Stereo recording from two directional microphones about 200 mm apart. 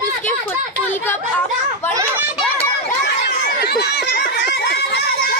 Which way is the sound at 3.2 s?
55° left (ahead or behind).